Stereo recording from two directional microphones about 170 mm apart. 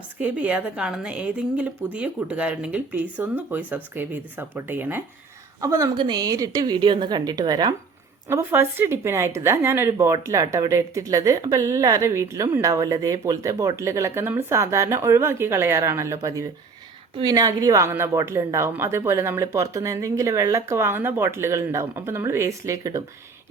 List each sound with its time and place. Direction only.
0.2 s a woman's voice: 10° right (ahead or behind)